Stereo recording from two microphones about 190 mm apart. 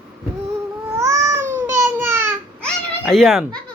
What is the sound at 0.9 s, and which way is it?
Babbling, 15° right (ahead or behind).